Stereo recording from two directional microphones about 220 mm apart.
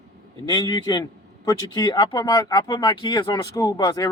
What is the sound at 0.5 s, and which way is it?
A man's voice, 20° left (ahead or behind).